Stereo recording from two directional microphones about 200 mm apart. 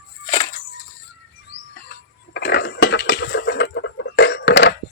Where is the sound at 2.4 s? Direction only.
55° left (ahead or behind).